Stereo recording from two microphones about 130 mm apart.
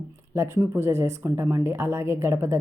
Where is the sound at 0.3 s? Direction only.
20° right (ahead or behind).